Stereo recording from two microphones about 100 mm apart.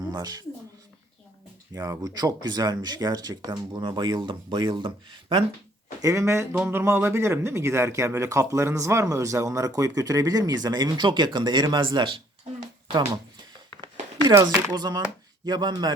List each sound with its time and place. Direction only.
0.0 s speech: 40° right (ahead or behind)
1.7 s speech: 35° right (ahead or behind); by 5.5 s 50° right (ahead or behind)
6.0 s speech: 30° right (ahead or behind); by 12.2 s 55° right (ahead or behind)
14.4 s speech: 45° right (ahead or behind)